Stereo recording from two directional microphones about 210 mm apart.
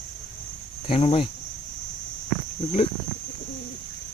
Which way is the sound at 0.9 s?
25° left (ahead or behind).